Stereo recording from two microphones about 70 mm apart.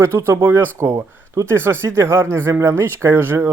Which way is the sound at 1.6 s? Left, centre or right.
Right.